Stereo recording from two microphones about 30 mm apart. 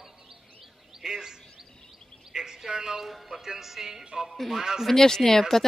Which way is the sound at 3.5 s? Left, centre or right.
Centre.